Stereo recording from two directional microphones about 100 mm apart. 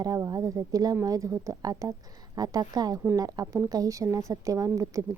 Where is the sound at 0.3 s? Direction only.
35° right (ahead or behind).